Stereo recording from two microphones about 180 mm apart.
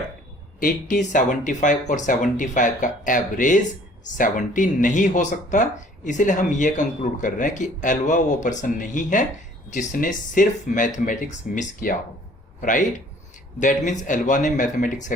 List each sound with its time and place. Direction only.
0.6 s a man's voice: 45° left (ahead or behind)